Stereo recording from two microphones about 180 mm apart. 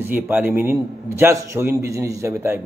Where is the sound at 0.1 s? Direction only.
10° right (ahead or behind).